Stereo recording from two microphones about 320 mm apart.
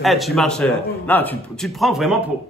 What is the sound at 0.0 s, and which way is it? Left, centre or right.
A man's voice, centre.